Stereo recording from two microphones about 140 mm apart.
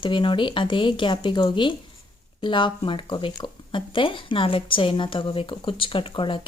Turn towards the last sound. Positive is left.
turn(degrees=35)  # may be behind; listen again after turning